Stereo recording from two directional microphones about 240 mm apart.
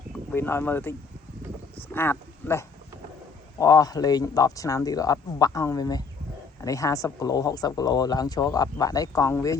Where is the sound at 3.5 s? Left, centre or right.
Centre.